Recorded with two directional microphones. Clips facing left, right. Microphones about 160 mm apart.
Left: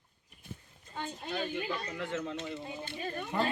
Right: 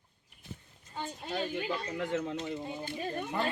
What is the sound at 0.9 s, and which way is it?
Speech, 5° right (ahead or behind).